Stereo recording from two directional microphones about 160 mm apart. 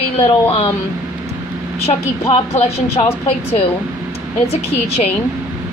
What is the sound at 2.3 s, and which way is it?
Speech, 40° left (ahead or behind).